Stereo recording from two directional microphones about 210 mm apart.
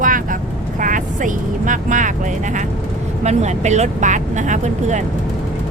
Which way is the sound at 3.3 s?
35° right (ahead or behind).